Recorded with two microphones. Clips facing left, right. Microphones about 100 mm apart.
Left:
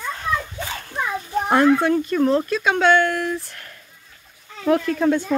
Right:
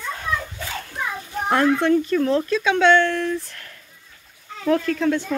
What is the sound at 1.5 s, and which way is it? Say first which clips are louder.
Speech: left 1 dB; 10° left (ahead or behind).